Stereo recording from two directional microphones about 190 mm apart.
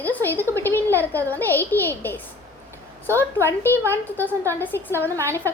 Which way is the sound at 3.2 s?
10° left (ahead or behind).